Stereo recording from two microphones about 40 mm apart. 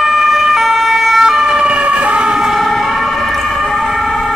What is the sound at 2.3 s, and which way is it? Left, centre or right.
Emergency vehicle, centre.